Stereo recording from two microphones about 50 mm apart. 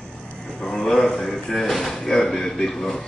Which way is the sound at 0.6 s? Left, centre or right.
Centre.